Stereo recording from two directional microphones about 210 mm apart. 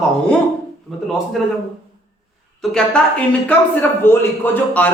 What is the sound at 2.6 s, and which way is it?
A man's voice, 5° left (ahead or behind).